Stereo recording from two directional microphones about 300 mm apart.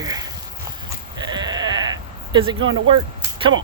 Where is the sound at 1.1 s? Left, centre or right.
Centre.